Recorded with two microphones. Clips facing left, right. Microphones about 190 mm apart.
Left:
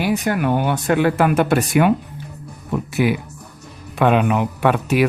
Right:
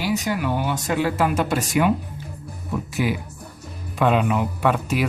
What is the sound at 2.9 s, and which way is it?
Speech, 65° left (ahead or behind).